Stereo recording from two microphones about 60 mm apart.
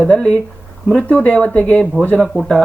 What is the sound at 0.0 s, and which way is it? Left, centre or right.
Speech, centre.